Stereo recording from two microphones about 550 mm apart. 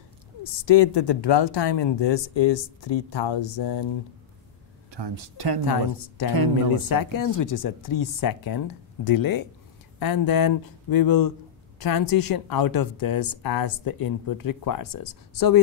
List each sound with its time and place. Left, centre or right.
0.4 s speech: left
4.9 s speech: right
5.7 s a woman's voice: left